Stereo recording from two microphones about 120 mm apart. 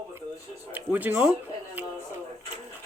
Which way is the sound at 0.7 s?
15° right (ahead or behind).